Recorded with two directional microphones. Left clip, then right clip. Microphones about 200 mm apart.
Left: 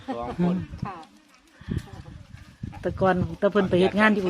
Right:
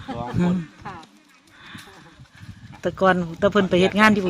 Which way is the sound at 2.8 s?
20° right (ahead or behind).